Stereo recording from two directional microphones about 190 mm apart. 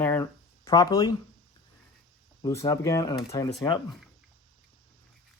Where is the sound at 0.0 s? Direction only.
15° left (ahead or behind).